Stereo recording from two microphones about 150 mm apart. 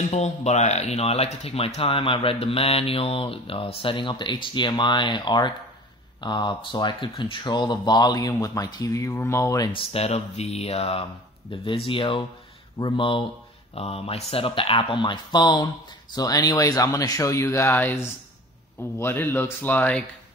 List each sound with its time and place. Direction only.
0.1 s speech: 50° left (ahead or behind); by 9.7 s 20° left (ahead or behind)
9.7 s speech: 40° left (ahead or behind); by 20.1 s 10° left (ahead or behind)